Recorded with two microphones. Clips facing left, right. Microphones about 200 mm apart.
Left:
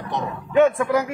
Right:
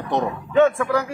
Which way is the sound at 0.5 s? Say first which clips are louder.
Even; 15° left (ahead or behind).